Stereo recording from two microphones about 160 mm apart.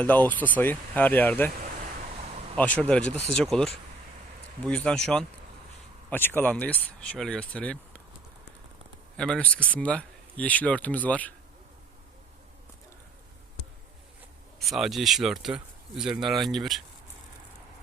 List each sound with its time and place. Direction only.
0.0 s speech: 10° left (ahead or behind)
1.6 s a sound: 55° right (ahead or behind)
2.7 s speech: 5° left (ahead or behind)
9.1 s speech: 5° left (ahead or behind)
14.6 s speech: centre (ahead or behind)